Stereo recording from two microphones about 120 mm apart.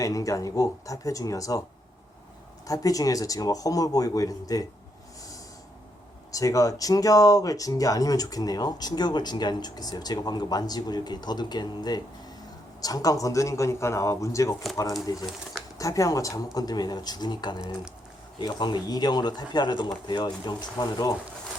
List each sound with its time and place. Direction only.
0.0 s speech: 30° left (ahead or behind)
2.6 s speech: 30° left (ahead or behind)
6.3 s speech: 30° left (ahead or behind)